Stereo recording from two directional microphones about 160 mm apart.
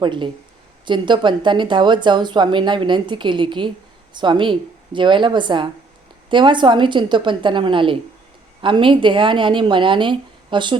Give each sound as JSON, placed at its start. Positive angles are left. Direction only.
{"t": 0.0, "sound": "a woman's voice", "side_deg": -30}